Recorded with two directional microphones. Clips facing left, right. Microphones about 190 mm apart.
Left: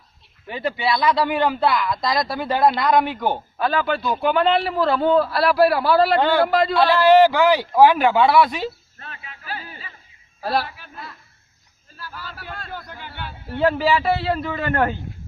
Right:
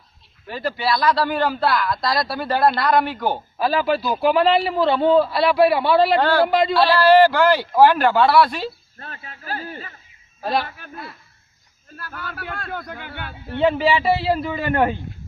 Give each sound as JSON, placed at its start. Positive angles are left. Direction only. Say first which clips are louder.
{"t": 0.4, "sound": "speech", "louder": "even", "side_deg": 20}
{"t": 2.6, "sound": "a man's voice", "louder": "even", "side_deg": -5}
{"t": 7.0, "sound": "speech", "louder": "even", "side_deg": 15}
{"t": 9.0, "sound": "a sound", "louder": "right 2 dB", "side_deg": -40}
{"t": 10.8, "sound": "a man's voice", "louder": "right 3 dB", "side_deg": -50}
{"t": 13.6, "sound": "a man's voice", "louder": "right 1 dB", "side_deg": 0}